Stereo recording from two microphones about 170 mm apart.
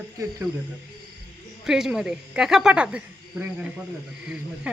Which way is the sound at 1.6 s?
5° right (ahead or behind).